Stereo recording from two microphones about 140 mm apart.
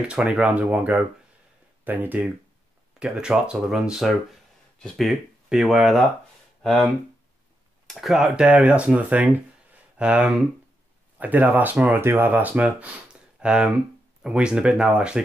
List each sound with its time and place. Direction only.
0.1 s speech: 5° right (ahead or behind)